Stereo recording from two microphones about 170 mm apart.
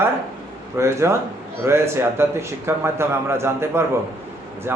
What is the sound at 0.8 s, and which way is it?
A man's voice, 15° right (ahead or behind).